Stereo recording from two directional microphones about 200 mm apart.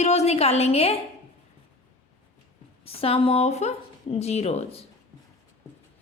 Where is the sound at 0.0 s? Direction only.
35° left (ahead or behind).